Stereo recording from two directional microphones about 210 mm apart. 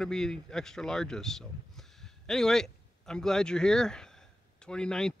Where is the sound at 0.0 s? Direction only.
5° left (ahead or behind).